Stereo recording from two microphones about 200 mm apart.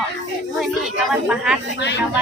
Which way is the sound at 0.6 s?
5° right (ahead or behind).